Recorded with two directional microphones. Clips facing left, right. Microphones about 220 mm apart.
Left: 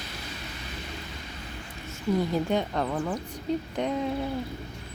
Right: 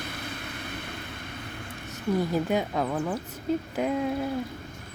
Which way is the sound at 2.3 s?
5° right (ahead or behind).